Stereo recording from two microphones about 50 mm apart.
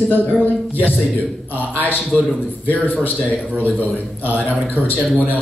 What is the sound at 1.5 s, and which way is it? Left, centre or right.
Speech, left.